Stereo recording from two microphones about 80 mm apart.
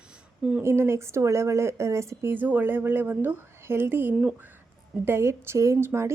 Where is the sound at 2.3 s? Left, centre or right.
Right.